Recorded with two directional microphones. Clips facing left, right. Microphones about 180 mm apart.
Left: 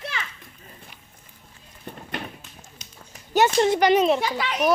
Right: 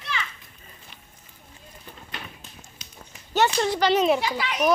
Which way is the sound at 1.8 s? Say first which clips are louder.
Left 8 dB; 55° left (ahead or behind).